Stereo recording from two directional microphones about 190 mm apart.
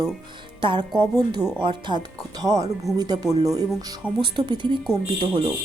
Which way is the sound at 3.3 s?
20° right (ahead or behind).